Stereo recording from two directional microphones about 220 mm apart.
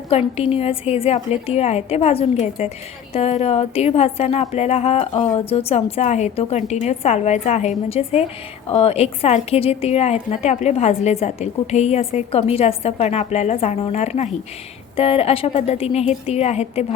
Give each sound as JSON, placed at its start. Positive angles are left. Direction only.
{"t": 0.1, "sound": "a woman's voice", "side_deg": 25}